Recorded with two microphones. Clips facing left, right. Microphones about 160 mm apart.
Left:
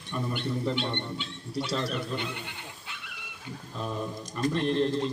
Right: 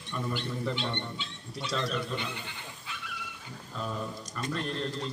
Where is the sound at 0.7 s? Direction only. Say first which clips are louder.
Left 3 dB; 55° left (ahead or behind).